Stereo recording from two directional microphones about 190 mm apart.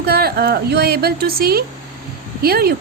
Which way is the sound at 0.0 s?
55° right (ahead or behind).